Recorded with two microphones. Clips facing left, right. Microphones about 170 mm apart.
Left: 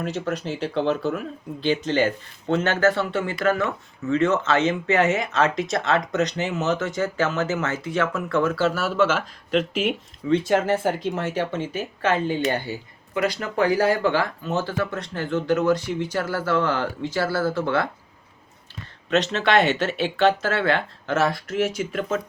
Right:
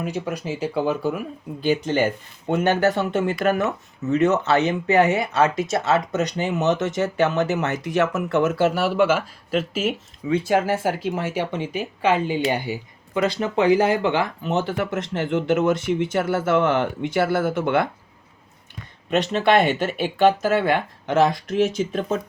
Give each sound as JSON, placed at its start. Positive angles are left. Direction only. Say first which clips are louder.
{"t": 0.0, "sound": "speech", "louder": "even", "side_deg": -10}
{"t": 19.1, "sound": "speech", "louder": "right 2 dB", "side_deg": -10}